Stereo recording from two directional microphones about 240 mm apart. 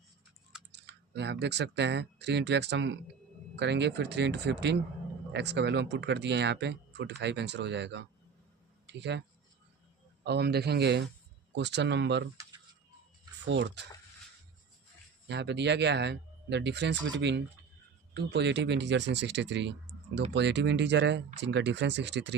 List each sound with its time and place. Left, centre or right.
0.7 s speech: right
10.2 s speech: right
13.4 s speech: right
15.3 s speech: right